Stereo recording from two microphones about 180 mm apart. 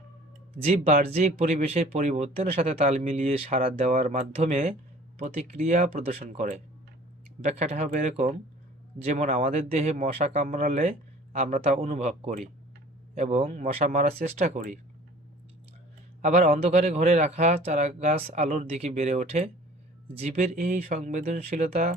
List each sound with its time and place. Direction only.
1.1 s speech: 40° right (ahead or behind)
7.6 s speech: 40° right (ahead or behind)
16.2 s speech: 40° right (ahead or behind)